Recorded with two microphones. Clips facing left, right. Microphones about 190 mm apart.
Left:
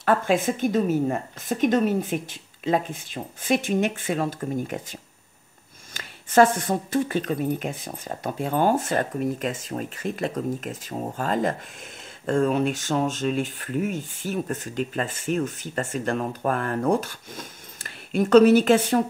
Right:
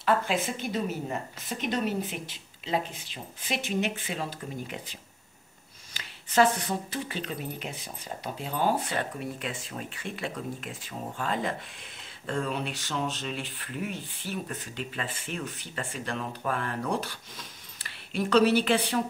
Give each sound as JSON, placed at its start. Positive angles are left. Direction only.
{"t": 0.0, "sound": "speech", "side_deg": 50}
{"t": 5.9, "sound": "speech", "side_deg": 50}